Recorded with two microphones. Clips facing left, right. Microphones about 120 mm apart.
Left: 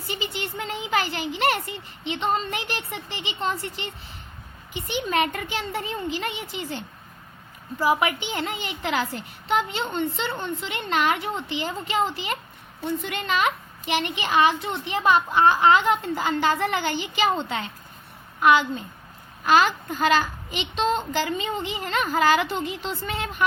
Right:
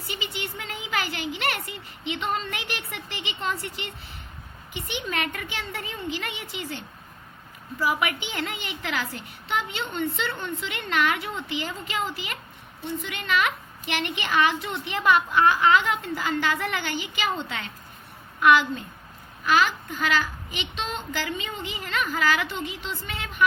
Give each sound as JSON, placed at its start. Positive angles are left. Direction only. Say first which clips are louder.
{"t": 0.1, "sound": "a woman's voice", "louder": "left 3 dB", "side_deg": 35}
{"t": 4.9, "sound": "a woman's voice", "louder": "left 6 dB", "side_deg": 30}
{"t": 19.5, "sound": "a woman's voice", "louder": "left 3 dB", "side_deg": 35}